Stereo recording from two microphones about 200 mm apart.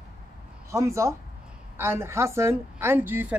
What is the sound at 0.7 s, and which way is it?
A woman's voice, 15° right (ahead or behind).